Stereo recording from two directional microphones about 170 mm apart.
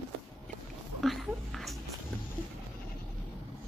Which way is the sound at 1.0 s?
Centre (ahead or behind).